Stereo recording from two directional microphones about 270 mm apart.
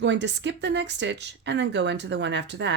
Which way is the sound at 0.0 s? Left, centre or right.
Right.